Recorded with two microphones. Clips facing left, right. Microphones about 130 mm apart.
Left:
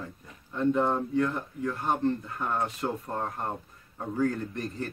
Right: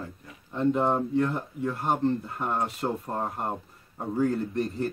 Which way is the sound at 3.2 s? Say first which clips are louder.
Right 2 dB; 15° right (ahead or behind).